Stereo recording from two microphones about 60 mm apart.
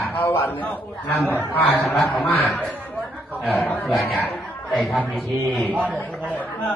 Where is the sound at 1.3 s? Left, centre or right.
Left.